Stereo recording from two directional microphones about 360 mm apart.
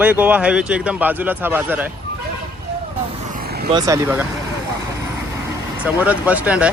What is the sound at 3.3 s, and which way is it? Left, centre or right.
Vehicle, right.